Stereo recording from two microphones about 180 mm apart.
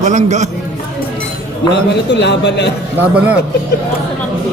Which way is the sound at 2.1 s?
75° left (ahead or behind).